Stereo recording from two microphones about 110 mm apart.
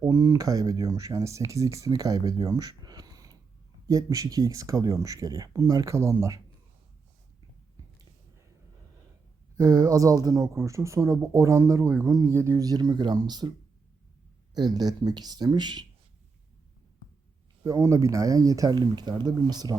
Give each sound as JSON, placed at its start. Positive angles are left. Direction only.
{"t": 0.0, "sound": "speech", "side_deg": -30}
{"t": 9.6, "sound": "speech", "side_deg": -40}
{"t": 14.5, "sound": "speech", "side_deg": -40}
{"t": 17.6, "sound": "speech", "side_deg": -30}